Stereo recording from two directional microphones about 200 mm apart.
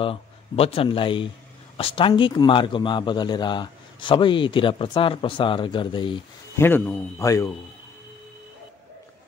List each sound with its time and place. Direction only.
0.0 s a man's voice: 30° left (ahead or behind)
6.6 s a man's voice: 10° left (ahead or behind)